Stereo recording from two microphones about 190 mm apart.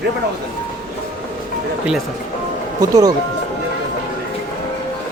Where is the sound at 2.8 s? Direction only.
20° right (ahead or behind).